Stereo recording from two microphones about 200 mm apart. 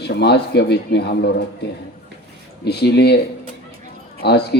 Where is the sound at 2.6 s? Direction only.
55° left (ahead or behind).